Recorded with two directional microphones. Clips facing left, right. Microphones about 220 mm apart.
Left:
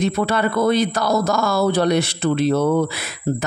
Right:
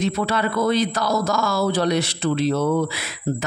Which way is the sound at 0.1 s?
55° left (ahead or behind).